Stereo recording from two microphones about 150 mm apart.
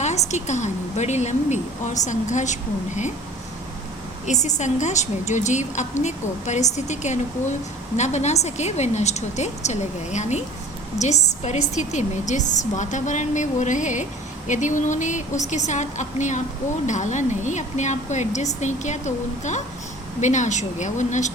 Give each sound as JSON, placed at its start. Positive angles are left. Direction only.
{"t": 0.0, "sound": "a woman's voice", "side_deg": 50}
{"t": 4.3, "sound": "a woman's voice", "side_deg": 50}